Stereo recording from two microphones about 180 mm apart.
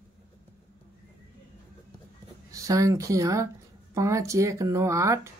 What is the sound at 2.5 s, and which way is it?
Speech, 20° right (ahead or behind).